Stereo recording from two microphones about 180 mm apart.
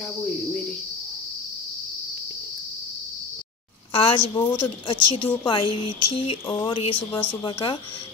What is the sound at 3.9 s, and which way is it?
Speech, 30° left (ahead or behind).